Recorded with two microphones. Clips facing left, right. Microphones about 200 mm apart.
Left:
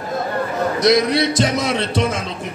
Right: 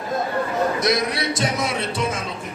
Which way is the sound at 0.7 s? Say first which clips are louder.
Left 7 dB; 90° left.